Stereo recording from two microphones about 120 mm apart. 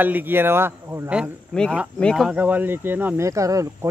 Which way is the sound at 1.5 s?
10° left (ahead or behind).